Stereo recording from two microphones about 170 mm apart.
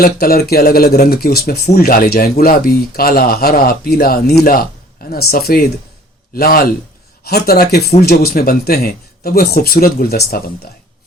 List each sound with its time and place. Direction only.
0.0 s a man's voice: 60° left (ahead or behind)